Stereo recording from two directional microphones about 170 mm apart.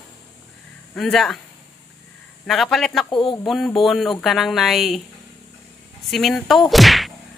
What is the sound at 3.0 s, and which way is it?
Speech, 30° left (ahead or behind).